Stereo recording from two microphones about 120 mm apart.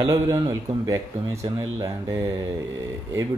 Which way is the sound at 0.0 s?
25° right (ahead or behind).